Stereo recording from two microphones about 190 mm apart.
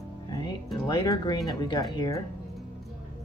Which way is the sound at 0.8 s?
20° left (ahead or behind).